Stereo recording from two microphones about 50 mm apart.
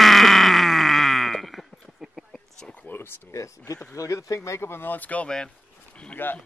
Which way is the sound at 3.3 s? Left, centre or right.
Left.